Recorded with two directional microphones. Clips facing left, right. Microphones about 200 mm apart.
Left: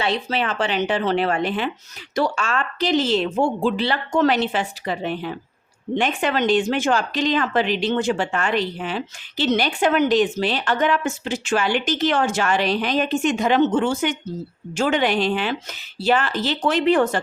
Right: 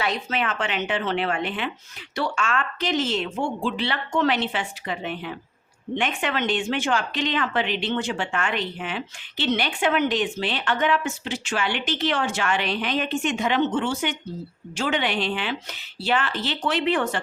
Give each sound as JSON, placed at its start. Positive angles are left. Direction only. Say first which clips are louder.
{"t": 0.0, "sound": "speech", "louder": "left 3 dB", "side_deg": 30}